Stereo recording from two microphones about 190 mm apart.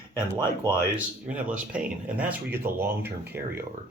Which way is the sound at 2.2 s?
10° right (ahead or behind).